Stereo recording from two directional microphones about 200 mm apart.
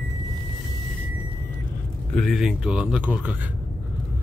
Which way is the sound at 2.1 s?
Centre (ahead or behind).